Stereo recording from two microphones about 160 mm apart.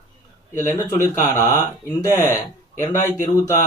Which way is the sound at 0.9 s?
15° left (ahead or behind).